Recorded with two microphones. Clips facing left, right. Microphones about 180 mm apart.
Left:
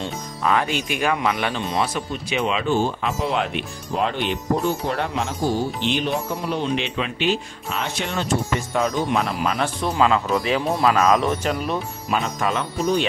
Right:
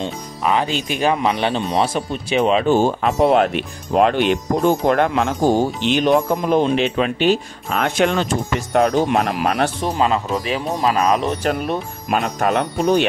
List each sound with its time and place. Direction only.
0.0 s speech: 20° right (ahead or behind); by 3.1 s 45° right (ahead or behind)
3.2 s speech: 55° right (ahead or behind); by 4.7 s 75° right (ahead or behind)
4.8 s speech: 50° right (ahead or behind)
5.9 s speech: 80° right
6.4 s speech: 45° right (ahead or behind)
7.8 s speech: 75° right (ahead or behind)
9.8 s speech: 25° right (ahead or behind)
11.4 s speech: 55° right (ahead or behind)